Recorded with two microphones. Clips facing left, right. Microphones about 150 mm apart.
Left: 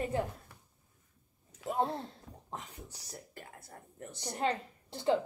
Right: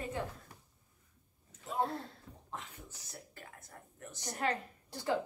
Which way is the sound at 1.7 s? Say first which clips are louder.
Left 1 dB; 25° left (ahead or behind).